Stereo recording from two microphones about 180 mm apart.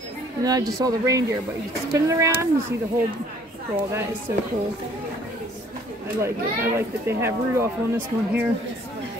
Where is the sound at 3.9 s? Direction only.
15° right (ahead or behind).